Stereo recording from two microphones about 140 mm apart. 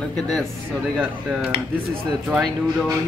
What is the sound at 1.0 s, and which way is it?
Speech, 5° right (ahead or behind).